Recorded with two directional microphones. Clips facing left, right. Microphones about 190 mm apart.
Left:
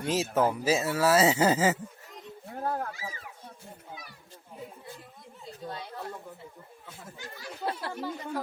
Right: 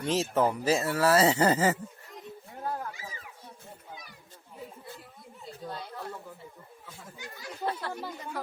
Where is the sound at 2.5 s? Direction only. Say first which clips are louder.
Left 4 dB; 55° left (ahead or behind).